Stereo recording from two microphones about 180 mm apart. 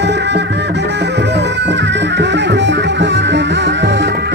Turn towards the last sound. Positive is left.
turn(degrees=-75)  # may be behind; listen again after turning